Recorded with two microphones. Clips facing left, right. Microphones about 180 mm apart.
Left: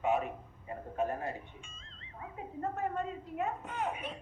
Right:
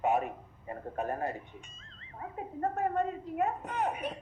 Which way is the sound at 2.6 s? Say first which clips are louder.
Right 5 dB; 45° right (ahead or behind).